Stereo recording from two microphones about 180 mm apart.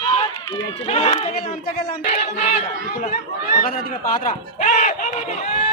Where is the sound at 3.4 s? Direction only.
55° left (ahead or behind).